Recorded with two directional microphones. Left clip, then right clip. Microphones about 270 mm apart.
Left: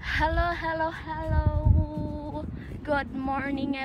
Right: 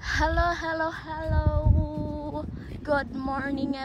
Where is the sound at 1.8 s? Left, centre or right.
Right.